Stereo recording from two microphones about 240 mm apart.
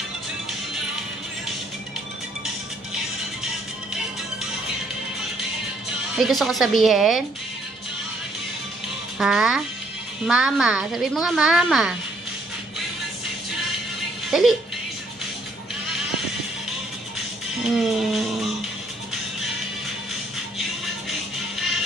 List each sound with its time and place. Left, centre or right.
6.1 s a woman's voice: centre
9.1 s a child's voice: centre
14.3 s speech: centre
17.6 s a woman's voice: centre